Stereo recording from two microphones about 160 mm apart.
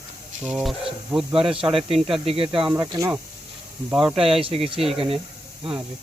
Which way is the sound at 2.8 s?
20° right (ahead or behind).